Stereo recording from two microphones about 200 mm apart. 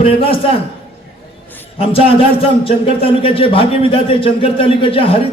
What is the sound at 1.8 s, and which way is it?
Speech, 30° left (ahead or behind).